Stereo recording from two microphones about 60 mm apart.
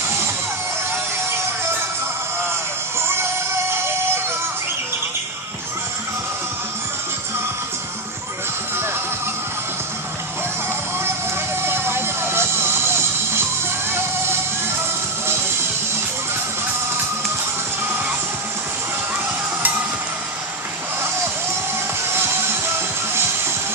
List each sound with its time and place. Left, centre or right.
3.7 s music: right
11.6 s music: right
22.1 s music: right